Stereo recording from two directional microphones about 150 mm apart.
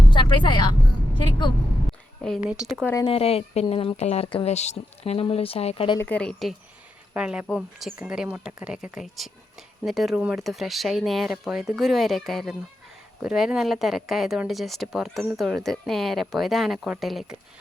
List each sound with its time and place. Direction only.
0.1 s speech: 30° left (ahead or behind)
2.5 s speech: 5° right (ahead or behind)
3.0 s speech: 40° left (ahead or behind)
4.5 s speech: 50° left (ahead or behind)
6.0 s speech: 10° left (ahead or behind)
7.1 s speech: 5° right (ahead or behind)